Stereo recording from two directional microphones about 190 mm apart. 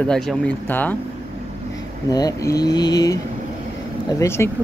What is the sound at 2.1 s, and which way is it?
Speech, 20° left (ahead or behind).